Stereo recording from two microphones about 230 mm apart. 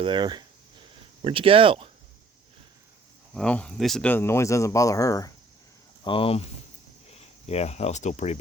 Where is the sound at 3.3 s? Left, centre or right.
Centre.